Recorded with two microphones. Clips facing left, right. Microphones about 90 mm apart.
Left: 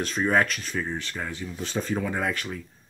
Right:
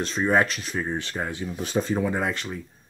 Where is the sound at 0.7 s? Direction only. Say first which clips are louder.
Right 3 dB; 20° right (ahead or behind).